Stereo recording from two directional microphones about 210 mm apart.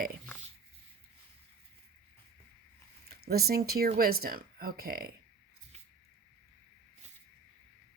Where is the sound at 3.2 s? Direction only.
45° right (ahead or behind).